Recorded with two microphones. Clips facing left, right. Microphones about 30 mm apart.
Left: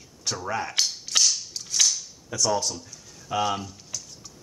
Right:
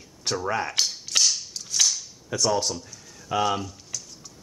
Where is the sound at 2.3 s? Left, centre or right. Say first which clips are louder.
Right 1 dB; right.